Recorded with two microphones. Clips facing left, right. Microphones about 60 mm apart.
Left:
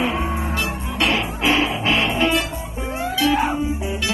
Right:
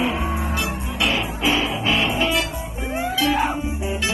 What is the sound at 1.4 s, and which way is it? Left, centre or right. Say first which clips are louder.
Music: left 3 dB; left.